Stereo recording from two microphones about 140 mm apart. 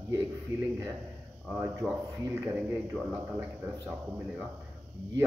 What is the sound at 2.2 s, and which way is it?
A man's voice, 10° right (ahead or behind).